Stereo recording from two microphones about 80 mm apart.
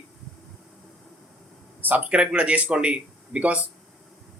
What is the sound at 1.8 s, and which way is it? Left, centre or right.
A man's voice, right.